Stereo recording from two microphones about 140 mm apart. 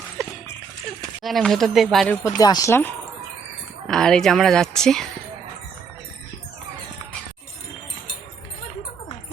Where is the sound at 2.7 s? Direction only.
15° left (ahead or behind).